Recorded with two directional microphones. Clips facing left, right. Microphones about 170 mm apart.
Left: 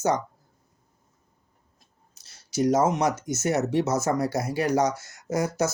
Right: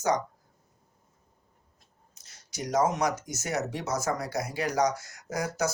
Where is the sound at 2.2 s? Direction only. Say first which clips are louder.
Left 13 dB; 25° left (ahead or behind).